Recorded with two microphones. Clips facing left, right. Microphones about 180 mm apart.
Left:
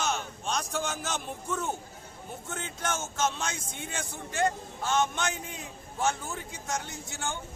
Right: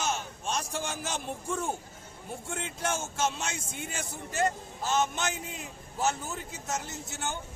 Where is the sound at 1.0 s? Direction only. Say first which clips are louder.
Even; 30° right (ahead or behind).